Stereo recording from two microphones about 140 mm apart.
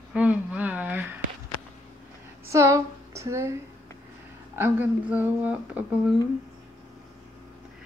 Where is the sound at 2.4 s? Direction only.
20° right (ahead or behind).